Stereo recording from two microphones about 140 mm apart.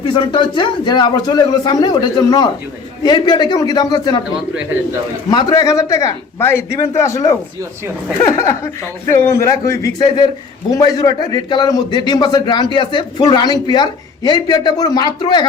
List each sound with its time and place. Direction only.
0.0 s a man's voice: 40° left (ahead or behind)
5.3 s a man's voice: 30° left (ahead or behind)